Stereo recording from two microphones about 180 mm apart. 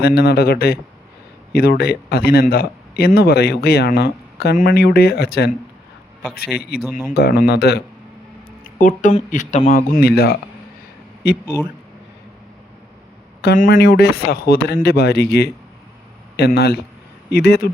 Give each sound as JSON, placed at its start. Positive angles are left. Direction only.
{"t": 0.0, "sound": "speech", "side_deg": 65}
{"t": 8.6, "sound": "a man's voice", "side_deg": 50}
{"t": 13.7, "sound": "speech", "side_deg": 70}